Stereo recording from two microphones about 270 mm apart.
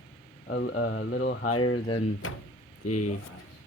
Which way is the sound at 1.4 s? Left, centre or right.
Left.